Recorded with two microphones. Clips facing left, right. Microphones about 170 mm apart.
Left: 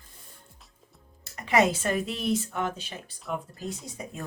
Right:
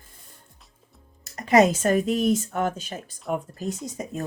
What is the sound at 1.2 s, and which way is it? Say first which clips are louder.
Speech: right 5 dB; 40° right (ahead or behind).